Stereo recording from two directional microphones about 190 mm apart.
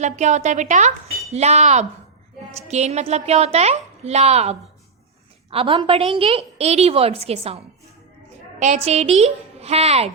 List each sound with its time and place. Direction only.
0.0 s a woman's voice: 40° right (ahead or behind)